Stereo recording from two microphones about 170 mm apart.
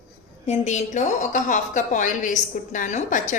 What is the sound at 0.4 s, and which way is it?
A woman's voice, 40° left (ahead or behind).